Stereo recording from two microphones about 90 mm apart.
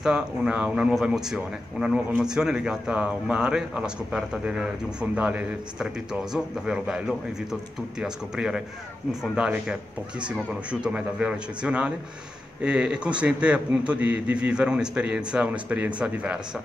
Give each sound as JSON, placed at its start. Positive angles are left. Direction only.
{"t": 0.0, "sound": "speech", "side_deg": -10}